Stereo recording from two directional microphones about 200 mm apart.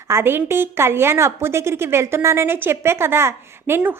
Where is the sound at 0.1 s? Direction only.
10° right (ahead or behind).